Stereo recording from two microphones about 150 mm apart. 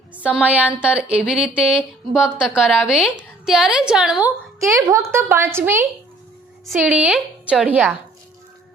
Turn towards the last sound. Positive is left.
turn(degrees=-10)  # may be behind; listen again after turning